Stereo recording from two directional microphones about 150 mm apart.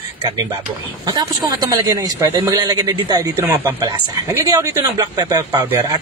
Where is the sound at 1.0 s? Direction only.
25° right (ahead or behind).